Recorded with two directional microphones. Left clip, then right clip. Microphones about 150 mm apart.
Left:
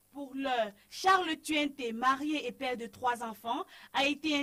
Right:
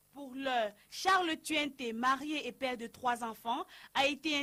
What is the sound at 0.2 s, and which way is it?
A woman's voice, 40° right (ahead or behind).